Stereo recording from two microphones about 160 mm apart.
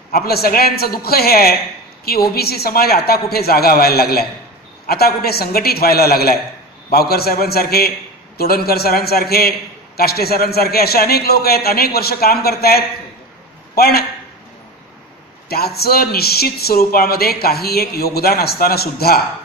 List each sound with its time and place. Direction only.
0.1 s speech: 75° left (ahead or behind)
15.4 s speech: 80° left